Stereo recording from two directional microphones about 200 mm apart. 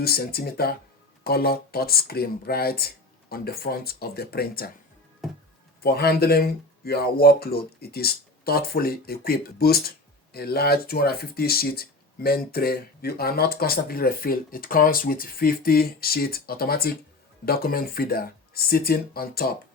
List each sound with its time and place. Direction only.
0.0 s speech: 50° left (ahead or behind)
5.2 s music: centre (ahead or behind)
5.8 s speech: 50° left (ahead or behind)